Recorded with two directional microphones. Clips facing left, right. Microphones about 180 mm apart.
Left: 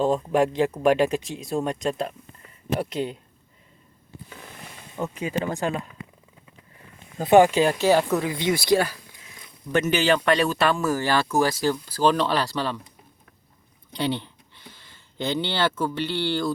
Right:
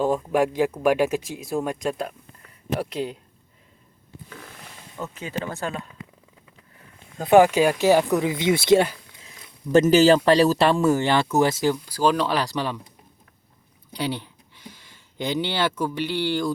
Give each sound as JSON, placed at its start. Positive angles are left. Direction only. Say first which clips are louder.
{"t": 0.2, "sound": "speech", "louder": "even", "side_deg": -5}
{"t": 4.9, "sound": "speech", "louder": "left 4 dB", "side_deg": 15}
{"t": 7.2, "sound": "speech", "louder": "right 1 dB", "side_deg": -5}
{"t": 9.7, "sound": "speech", "louder": "right 6 dB", "side_deg": -40}
{"t": 13.9, "sound": "speech", "louder": "left 2 dB", "side_deg": -10}